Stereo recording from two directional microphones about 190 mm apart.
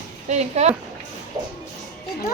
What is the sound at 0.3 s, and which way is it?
Speech, 35° right (ahead or behind).